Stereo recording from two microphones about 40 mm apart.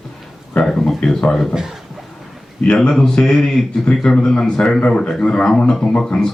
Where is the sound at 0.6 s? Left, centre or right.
Centre.